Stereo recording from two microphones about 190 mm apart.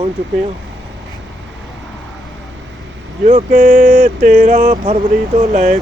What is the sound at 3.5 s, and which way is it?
Speech, 45° right (ahead or behind).